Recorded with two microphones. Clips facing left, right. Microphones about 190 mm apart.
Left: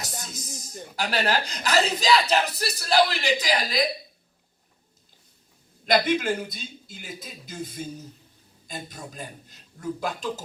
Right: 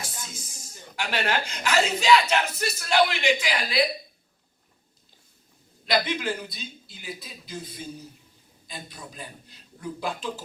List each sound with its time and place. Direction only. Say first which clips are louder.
0.0 s music: left 2 dB; 40° left (ahead or behind)
0.9 s speech: left 2 dB; 35° left (ahead or behind)
5.8 s a man's voice: left 4 dB; 45° left (ahead or behind)